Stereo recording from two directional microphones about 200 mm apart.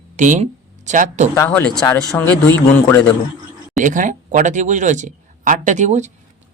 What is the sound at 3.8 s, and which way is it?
Speech, 40° right (ahead or behind).